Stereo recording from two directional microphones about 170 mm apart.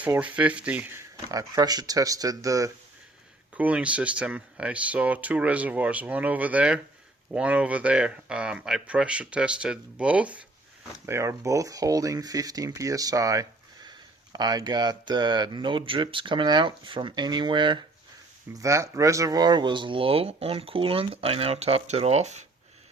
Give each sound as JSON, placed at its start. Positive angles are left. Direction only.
{"t": 0.2, "sound": "speech", "side_deg": -10}
{"t": 3.5, "sound": "speech", "side_deg": -10}